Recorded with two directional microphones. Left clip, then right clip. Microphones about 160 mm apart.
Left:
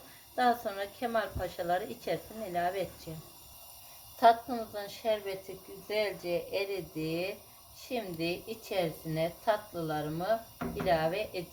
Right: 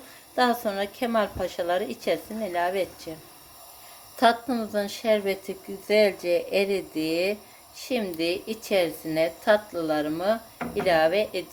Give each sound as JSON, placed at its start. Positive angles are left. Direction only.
{"t": 0.3, "sound": "a woman's voice", "side_deg": -35}
{"t": 4.2, "sound": "a woman's voice", "side_deg": -50}